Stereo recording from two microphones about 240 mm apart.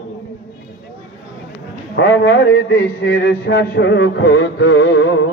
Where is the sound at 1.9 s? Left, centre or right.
Left.